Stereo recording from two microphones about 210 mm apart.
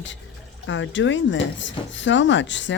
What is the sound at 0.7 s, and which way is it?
Speech, 60° left (ahead or behind).